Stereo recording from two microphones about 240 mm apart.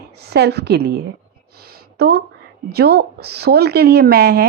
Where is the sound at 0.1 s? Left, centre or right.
Right.